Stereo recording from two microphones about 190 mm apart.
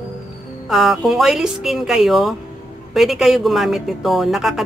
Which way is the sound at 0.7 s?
Centre (ahead or behind).